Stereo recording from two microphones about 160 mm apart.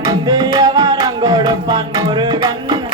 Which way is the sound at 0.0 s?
25° right (ahead or behind).